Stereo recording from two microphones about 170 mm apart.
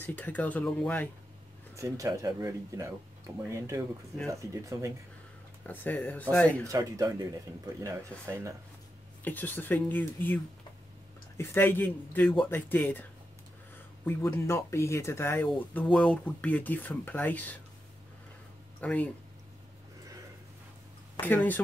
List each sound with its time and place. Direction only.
0.0 s speech: 10° left (ahead or behind)
1.8 s speech: 20° right (ahead or behind)
5.7 s speech: 10° left (ahead or behind)
6.7 s speech: 20° right (ahead or behind)
9.2 s speech: 10° left (ahead or behind)
14.0 s speech: 15° left (ahead or behind)
18.8 s speech: 10° left (ahead or behind)
21.2 s speech: 10° left (ahead or behind)